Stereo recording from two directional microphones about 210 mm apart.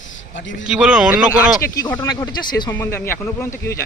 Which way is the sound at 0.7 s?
5° right (ahead or behind).